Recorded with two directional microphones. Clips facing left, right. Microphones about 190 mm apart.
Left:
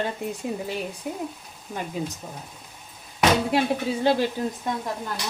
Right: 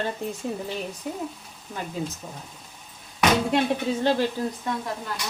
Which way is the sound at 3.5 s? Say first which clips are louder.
Even; 10° left (ahead or behind).